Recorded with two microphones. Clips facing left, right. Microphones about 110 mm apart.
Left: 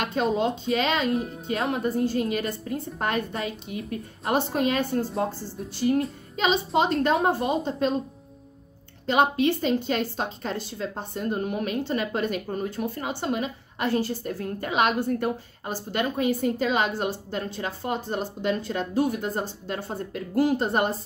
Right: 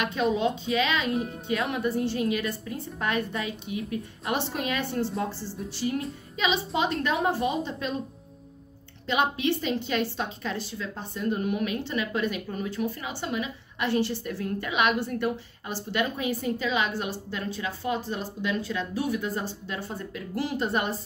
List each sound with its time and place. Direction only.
0.0 s a woman's voice: 40° left (ahead or behind)
1.1 s speech: centre (ahead or behind)
1.5 s a woman's voice: 35° left (ahead or behind)
6.4 s a woman's voice: 40° left (ahead or behind)
9.0 s a woman's voice: 45° left (ahead or behind)